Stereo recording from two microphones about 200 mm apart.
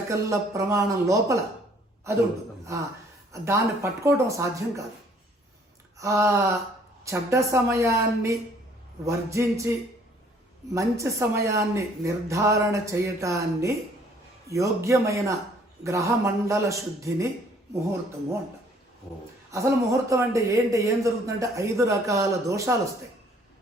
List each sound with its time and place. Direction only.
0.1 s a man's voice: 15° right (ahead or behind)
3.3 s a man's voice: 15° right (ahead or behind)
6.0 s a man's voice: 15° right (ahead or behind)
10.8 s a man's voice: 15° right (ahead or behind)
19.5 s a man's voice: 15° right (ahead or behind)